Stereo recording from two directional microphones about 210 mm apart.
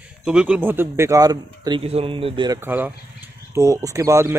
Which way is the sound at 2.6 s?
10° right (ahead or behind).